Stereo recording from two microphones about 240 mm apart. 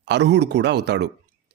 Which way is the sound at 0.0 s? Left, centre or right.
Right.